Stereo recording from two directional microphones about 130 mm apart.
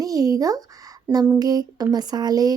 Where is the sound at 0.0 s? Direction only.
30° right (ahead or behind).